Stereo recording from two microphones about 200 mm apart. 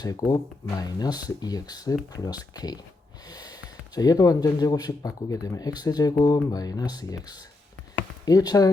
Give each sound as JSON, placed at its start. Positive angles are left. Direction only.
{"t": 0.0, "sound": "speech", "side_deg": 20}
{"t": 3.2, "sound": "snort", "side_deg": 20}
{"t": 3.9, "sound": "speech", "side_deg": 20}